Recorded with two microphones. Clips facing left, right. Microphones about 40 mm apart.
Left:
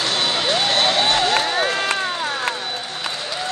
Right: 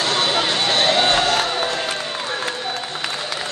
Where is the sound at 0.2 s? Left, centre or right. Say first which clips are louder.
Right 2 dB; centre.